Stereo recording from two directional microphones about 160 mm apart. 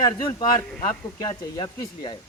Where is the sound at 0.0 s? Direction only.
25° left (ahead or behind).